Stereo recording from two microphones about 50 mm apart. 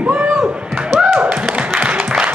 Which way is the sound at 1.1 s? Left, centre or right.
Right.